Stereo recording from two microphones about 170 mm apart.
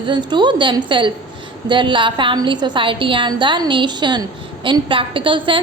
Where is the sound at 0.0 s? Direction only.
25° right (ahead or behind).